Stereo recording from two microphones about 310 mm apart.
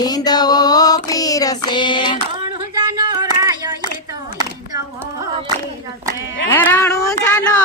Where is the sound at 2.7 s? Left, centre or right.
Centre.